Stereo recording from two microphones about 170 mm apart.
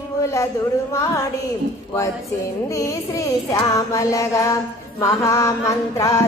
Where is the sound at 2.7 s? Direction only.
20° left (ahead or behind).